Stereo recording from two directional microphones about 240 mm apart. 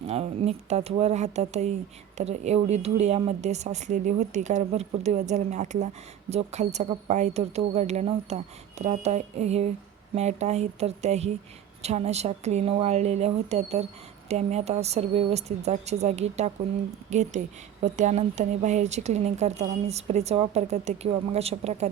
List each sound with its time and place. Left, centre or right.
0.1 s a woman's voice: right